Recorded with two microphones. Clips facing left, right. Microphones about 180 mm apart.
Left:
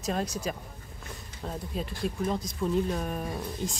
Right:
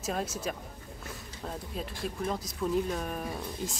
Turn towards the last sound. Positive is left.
turn(degrees=0)  # may be behind; listen again after turning